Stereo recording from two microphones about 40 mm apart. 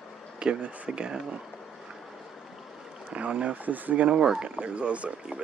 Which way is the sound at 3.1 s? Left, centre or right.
Right.